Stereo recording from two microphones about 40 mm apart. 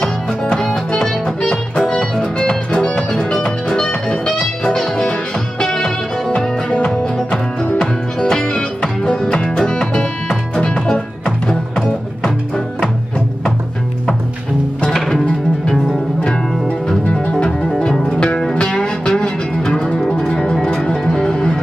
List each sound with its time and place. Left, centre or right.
0.5 s music: left
14.9 s music: centre
16.2 s music: left
17.5 s music: centre
18.0 s music: left